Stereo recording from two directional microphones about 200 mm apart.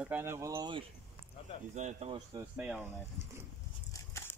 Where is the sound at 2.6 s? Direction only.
5° right (ahead or behind).